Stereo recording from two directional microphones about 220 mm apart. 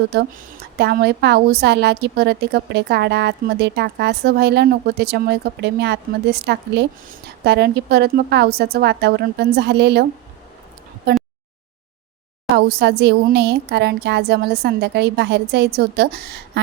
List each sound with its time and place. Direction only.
0.1 s a woman's voice: 45° right (ahead or behind)
12.5 s a woman's voice: 45° right (ahead or behind)